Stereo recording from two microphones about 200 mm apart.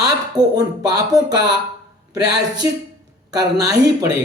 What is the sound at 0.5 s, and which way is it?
Speech, 20° right (ahead or behind).